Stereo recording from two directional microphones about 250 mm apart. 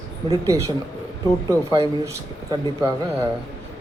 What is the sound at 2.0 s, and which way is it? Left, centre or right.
Speech, centre.